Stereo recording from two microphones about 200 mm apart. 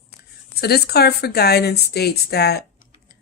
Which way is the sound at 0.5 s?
50° left (ahead or behind).